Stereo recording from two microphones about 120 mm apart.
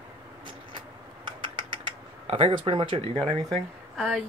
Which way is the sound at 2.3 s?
55° right (ahead or behind).